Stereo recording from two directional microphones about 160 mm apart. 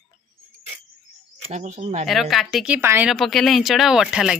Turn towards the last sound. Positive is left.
turn(degrees=-5)  # may be behind; listen again after turning